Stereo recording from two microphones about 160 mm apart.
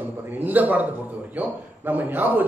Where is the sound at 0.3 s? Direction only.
10° right (ahead or behind).